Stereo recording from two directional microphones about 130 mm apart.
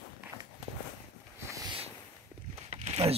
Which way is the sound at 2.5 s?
55° right (ahead or behind).